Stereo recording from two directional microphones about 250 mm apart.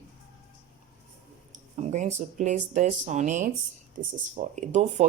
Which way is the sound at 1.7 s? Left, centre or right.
Right.